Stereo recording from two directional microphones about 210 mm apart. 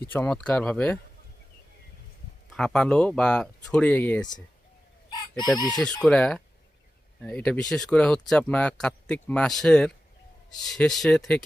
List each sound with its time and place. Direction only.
0.0 s speech: 10° left (ahead or behind)
2.5 s speech: centre (ahead or behind)
5.4 s chicken: 20° left (ahead or behind)
5.7 s speech: 5° left (ahead or behind)